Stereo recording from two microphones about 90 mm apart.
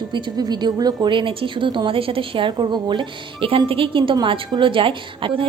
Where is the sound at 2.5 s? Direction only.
50° right (ahead or behind).